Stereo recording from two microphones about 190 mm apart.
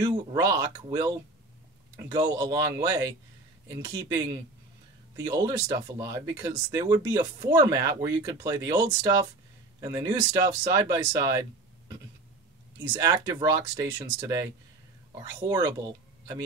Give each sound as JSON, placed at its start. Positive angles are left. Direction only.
{"t": 0.0, "sound": "speech", "side_deg": -20}
{"t": 12.9, "sound": "speech", "side_deg": -20}